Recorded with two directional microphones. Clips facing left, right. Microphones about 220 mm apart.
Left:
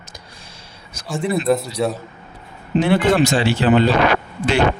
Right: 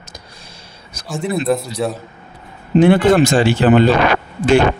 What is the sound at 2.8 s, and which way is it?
Speech, 50° right (ahead or behind).